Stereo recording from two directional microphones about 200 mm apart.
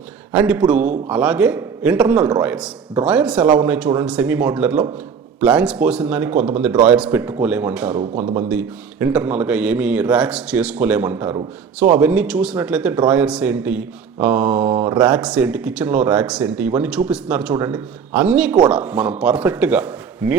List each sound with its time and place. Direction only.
0.3 s speech: 5° right (ahead or behind)